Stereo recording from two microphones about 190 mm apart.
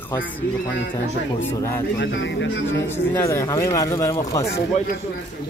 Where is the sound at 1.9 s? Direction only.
70° left (ahead or behind).